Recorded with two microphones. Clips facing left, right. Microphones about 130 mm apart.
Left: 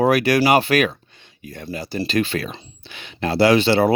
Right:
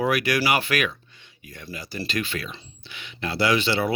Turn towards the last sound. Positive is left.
turn(degrees=35)  # may be behind; listen again after turning